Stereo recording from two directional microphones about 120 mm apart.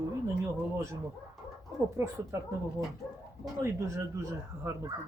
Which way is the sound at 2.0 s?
20° right (ahead or behind).